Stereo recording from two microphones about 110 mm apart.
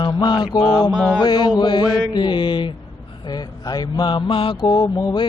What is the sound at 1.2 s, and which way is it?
Mantra, 45° left (ahead or behind).